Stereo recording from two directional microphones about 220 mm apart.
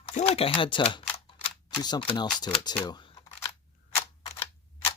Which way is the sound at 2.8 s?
20° left (ahead or behind).